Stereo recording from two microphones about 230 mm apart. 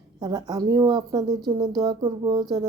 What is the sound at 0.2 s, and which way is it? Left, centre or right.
Speech, centre.